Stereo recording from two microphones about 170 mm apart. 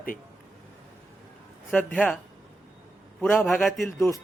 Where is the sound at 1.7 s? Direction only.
10° left (ahead or behind).